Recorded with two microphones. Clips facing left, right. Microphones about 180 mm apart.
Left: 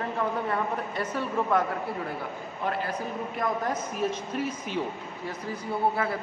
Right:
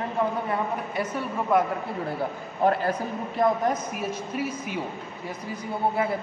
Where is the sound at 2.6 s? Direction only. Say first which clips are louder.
Right 9 dB; 40° right (ahead or behind).